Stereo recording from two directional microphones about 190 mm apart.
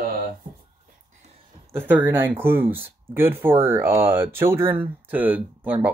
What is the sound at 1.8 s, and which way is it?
Speech, 10° right (ahead or behind).